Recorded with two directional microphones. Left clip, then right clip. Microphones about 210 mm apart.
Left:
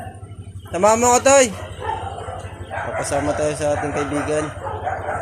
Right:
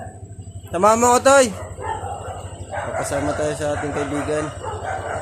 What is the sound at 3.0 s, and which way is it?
A man's voice, 5° right (ahead or behind).